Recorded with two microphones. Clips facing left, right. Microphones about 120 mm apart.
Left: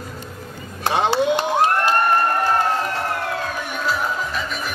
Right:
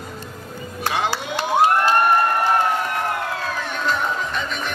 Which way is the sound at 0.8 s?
25° left (ahead or behind).